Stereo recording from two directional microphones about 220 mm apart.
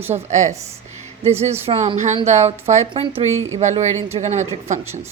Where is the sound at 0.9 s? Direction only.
30° right (ahead or behind).